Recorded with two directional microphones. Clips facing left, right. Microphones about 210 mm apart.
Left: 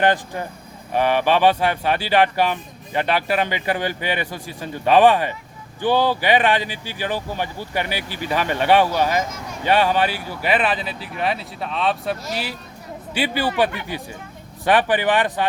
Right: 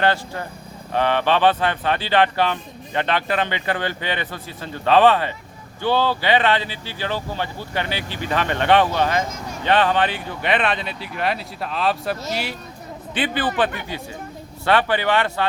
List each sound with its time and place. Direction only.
0.0 s a man's voice: 15° left (ahead or behind)
14.6 s a man's voice: 15° left (ahead or behind)